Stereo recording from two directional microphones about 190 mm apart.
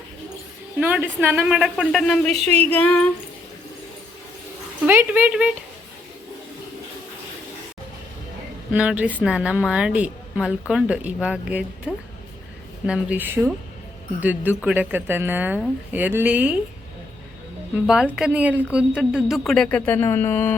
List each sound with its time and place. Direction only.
0.8 s a woman's voice: 10° right (ahead or behind)
2.3 s speech: 35° right (ahead or behind)
2.6 s speech: 10° left (ahead or behind)
4.9 s a woman's voice: 10° right (ahead or behind)
8.7 s a woman's voice: 5° right (ahead or behind)
17.8 s a woman's voice: 5° right (ahead or behind); by 20.6 s 10° left (ahead or behind)